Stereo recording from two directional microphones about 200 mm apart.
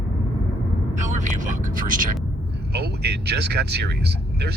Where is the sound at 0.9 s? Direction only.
40° right (ahead or behind).